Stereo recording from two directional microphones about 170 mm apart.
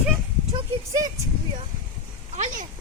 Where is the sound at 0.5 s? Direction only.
25° right (ahead or behind).